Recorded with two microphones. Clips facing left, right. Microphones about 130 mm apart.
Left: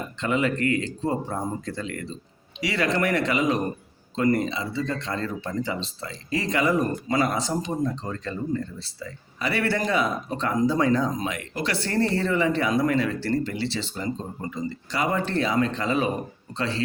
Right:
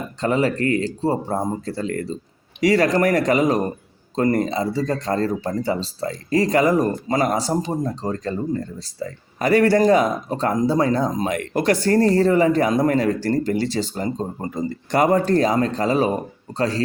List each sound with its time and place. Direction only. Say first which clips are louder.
0.2 s speech: right 4 dB; 35° right (ahead or behind)